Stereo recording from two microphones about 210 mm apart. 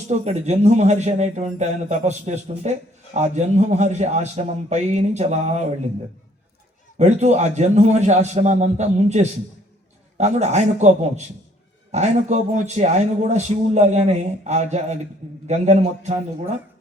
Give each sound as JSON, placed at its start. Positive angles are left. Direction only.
{"t": 0.1, "sound": "a man's voice", "side_deg": -30}
{"t": 7.0, "sound": "a man's voice", "side_deg": -35}